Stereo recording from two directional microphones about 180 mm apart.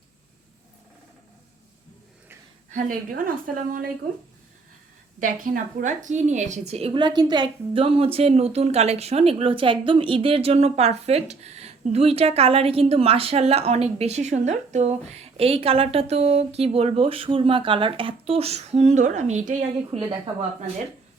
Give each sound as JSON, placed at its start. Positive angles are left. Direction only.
{"t": 2.6, "sound": "a woman's voice", "side_deg": -45}
{"t": 5.2, "sound": "a woman's voice", "side_deg": -45}